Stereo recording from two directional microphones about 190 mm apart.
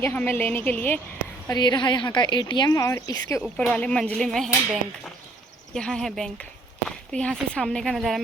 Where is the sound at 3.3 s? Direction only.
Centre (ahead or behind).